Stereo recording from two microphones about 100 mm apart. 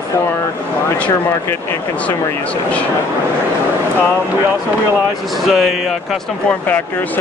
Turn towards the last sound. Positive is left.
turn(degrees=0)  # may be behind; listen again after turning